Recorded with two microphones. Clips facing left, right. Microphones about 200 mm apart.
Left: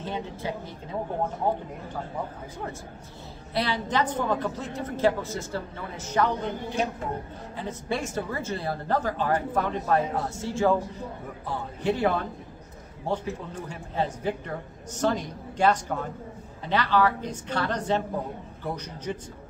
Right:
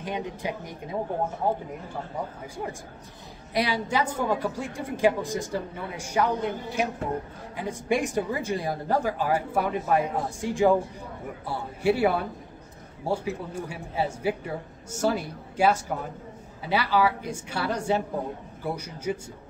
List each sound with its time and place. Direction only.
0.0 s a woman's voice: 15° right (ahead or behind)
3.5 s a woman's voice: 10° right (ahead or behind)